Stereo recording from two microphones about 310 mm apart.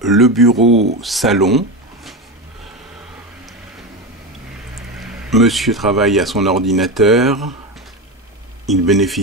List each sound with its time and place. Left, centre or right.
0.1 s speech: centre
0.6 s speech: right
1.0 s speech: centre
4.7 s speech: centre
8.8 s speech: centre